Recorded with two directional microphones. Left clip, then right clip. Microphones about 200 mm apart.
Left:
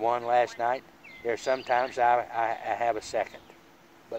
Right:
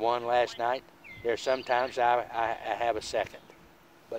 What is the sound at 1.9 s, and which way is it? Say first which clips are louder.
Speech: left 2 dB; 50° right (ahead or behind).